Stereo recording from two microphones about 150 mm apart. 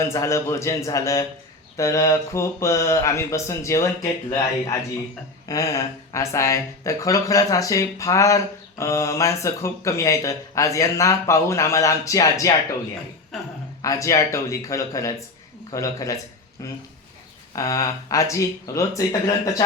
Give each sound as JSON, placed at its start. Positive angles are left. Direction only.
{"t": 0.0, "sound": "speech", "side_deg": 20}
{"t": 13.3, "sound": "speech", "side_deg": 0}
{"t": 13.8, "sound": "speech", "side_deg": 20}